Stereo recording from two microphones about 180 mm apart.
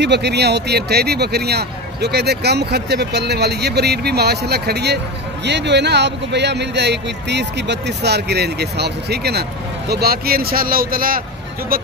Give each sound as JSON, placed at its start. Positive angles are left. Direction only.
{"t": 0.0, "sound": "speech", "side_deg": -70}